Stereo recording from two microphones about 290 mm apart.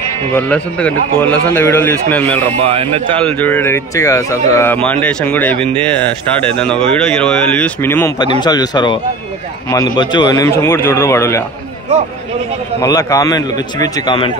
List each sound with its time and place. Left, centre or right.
0.3 s speech: centre
2.6 s speech: right
3.3 s speech: centre
12.8 s speech: centre